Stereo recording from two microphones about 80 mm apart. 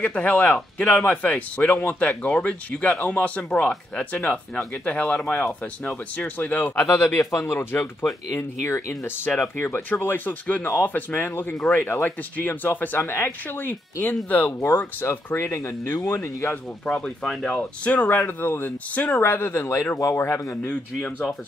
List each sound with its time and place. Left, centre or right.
0.0 s speech: centre; by 7.5 s left
7.5 s speech: left
17.0 s speech: centre
17.6 s speech: centre; by 20.5 s left